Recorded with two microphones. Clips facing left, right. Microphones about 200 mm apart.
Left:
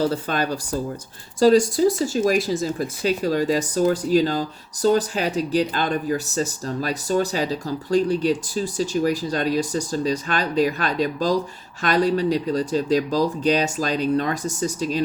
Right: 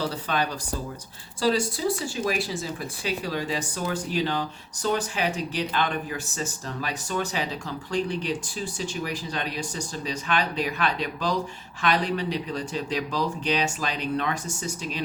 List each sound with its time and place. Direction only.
0.0 s speech: 45° left (ahead or behind)